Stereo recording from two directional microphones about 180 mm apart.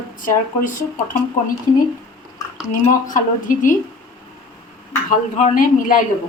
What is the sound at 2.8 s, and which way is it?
Speech, 45° left (ahead or behind).